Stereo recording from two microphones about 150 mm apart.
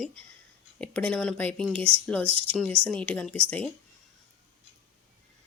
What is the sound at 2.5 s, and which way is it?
Speech, 5° left (ahead or behind).